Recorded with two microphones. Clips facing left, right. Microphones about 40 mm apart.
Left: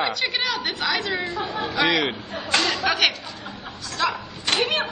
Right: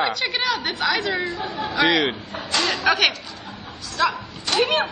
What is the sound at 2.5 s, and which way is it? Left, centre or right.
Chatter, left.